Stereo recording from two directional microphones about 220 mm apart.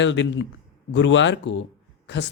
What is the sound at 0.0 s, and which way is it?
Speech, 55° left (ahead or behind).